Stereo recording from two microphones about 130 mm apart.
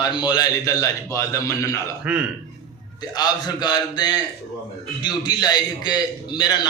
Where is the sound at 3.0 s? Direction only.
30° left (ahead or behind).